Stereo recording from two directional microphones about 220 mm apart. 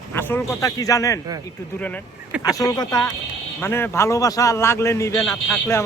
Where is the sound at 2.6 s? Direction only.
15° left (ahead or behind).